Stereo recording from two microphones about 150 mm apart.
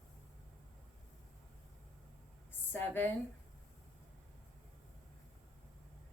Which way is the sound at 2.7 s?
10° left (ahead or behind).